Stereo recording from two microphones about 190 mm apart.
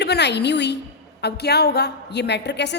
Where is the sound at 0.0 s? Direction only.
65° left (ahead or behind).